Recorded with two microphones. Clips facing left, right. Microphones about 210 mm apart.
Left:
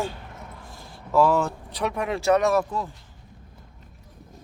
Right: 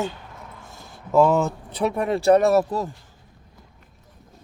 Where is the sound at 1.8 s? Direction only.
35° right (ahead or behind).